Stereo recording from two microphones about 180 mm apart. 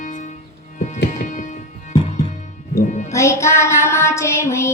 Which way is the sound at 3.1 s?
15° left (ahead or behind).